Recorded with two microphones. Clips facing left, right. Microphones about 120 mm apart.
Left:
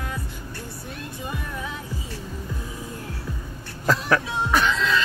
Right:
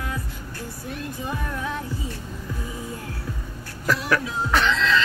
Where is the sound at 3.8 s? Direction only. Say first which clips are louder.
Left 1 dB; 30° left (ahead or behind).